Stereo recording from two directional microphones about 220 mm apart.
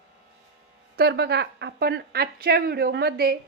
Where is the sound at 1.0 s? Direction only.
50° right (ahead or behind).